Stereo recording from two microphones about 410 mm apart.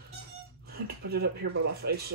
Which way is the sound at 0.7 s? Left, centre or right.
Right.